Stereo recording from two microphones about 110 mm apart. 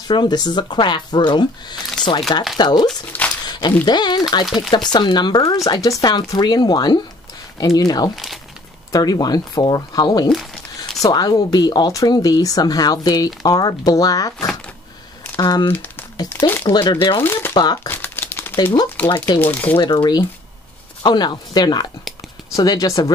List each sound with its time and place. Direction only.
0.1 s speech: 40° left (ahead or behind)
3.1 s a sound: 15° left (ahead or behind)
3.8 s speech: 40° left (ahead or behind)
10.3 s speech: centre (ahead or behind)
10.8 s speech: 35° left (ahead or behind)
15.3 s speech: 45° left (ahead or behind)
15.7 s crumpling: 15° left (ahead or behind)
16.3 s speech: 15° left (ahead or behind)
16.8 s speech: 50° left (ahead or behind)
17.2 s speech: 20° left (ahead or behind)
17.8 s crumpling: 20° left (ahead or behind)
18.6 s speech: 45° left (ahead or behind)
18.9 s speech: 20° left (ahead or behind)
19.8 s speech: 45° left (ahead or behind)